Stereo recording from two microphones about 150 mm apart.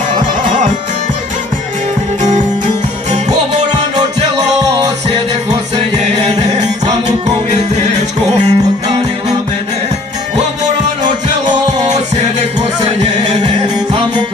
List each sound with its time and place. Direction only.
0.4 s music: 55° right (ahead or behind)
2.2 s music: 55° right (ahead or behind)
7.1 s music: 50° right (ahead or behind)
13.0 s music: 50° right (ahead or behind)